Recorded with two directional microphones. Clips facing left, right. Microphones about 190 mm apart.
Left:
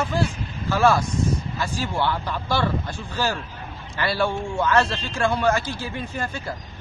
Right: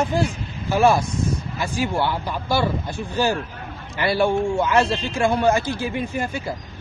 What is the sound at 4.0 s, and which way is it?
Speech, 15° right (ahead or behind).